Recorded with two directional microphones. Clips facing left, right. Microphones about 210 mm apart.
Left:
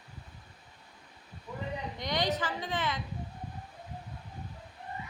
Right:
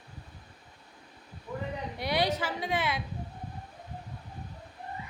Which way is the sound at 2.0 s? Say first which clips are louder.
Right 3 dB; 10° right (ahead or behind).